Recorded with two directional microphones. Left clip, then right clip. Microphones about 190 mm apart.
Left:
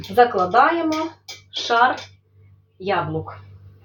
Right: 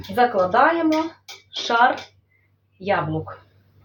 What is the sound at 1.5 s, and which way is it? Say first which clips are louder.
Speech: left 1 dB; 25° right (ahead or behind).